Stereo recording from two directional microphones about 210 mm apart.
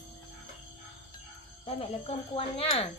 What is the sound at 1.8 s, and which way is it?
Speech, 25° left (ahead or behind).